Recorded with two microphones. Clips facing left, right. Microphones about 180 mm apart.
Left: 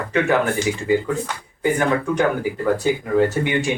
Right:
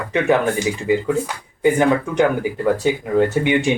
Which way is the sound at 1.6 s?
20° right (ahead or behind).